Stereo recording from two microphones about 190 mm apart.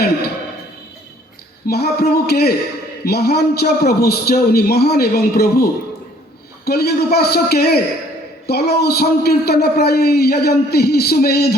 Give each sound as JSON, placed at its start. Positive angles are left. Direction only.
{"t": 1.6, "sound": "a man's voice", "side_deg": 55}
{"t": 6.7, "sound": "a man's voice", "side_deg": 55}